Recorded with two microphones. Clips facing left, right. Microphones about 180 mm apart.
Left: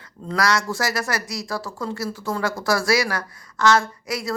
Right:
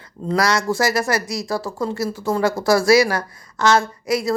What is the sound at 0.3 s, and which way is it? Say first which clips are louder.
Speech: right 3 dB; 25° right (ahead or behind).